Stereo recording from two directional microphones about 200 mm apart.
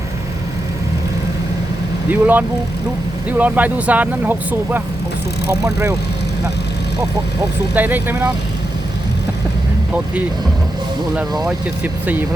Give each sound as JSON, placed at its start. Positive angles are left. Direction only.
{"t": 2.0, "sound": "speech", "side_deg": -10}
{"t": 7.8, "sound": "speech", "side_deg": -10}
{"t": 11.4, "sound": "speech", "side_deg": -5}